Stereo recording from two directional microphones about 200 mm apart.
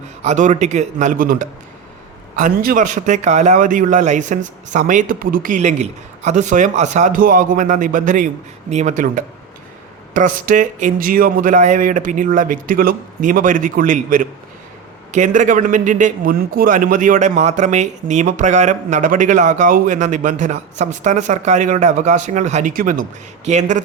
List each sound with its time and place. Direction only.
0.2 s a man's voice: 35° right (ahead or behind)